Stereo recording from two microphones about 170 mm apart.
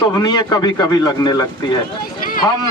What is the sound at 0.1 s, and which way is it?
Speech, 20° left (ahead or behind).